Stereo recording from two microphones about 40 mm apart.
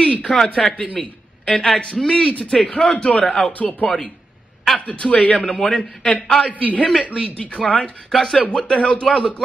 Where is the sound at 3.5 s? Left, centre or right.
Left.